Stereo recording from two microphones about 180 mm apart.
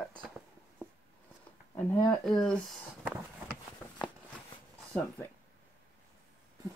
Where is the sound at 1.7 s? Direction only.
15° left (ahead or behind).